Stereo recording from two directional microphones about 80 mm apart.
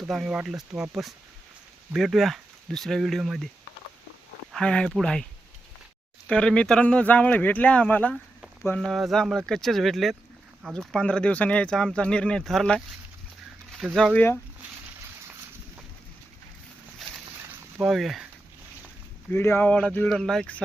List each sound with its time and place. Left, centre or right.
0.1 s speech: centre
4.5 s speech: centre
6.2 s speech: centre
8.8 s speech: centre
10.8 s speech: centre
13.9 s speech: centre
17.8 s speech: centre
19.3 s speech: left
19.6 s speech: centre
20.1 s speech: centre